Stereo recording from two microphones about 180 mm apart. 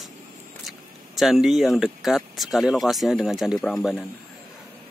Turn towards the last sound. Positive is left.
turn(degrees=0)  # may be behind; listen again after turning